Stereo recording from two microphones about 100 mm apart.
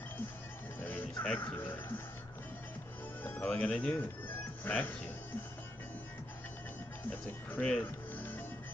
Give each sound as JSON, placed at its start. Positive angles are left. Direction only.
{"t": 0.7, "sound": "music", "side_deg": 15}
{"t": 3.4, "sound": "speech", "side_deg": 10}
{"t": 7.1, "sound": "speech", "side_deg": 15}